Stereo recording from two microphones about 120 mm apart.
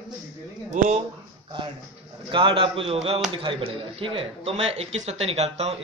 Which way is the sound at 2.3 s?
45° right (ahead or behind).